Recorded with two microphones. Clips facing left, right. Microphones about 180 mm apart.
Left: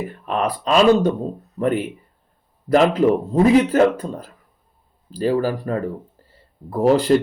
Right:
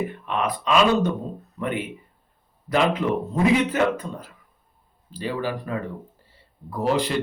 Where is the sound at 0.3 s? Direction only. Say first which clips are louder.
Left 4 dB; 40° left (ahead or behind).